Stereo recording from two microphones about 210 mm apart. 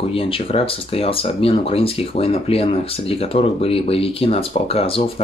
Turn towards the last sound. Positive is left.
turn(degrees=25)  # may be behind; listen again after turning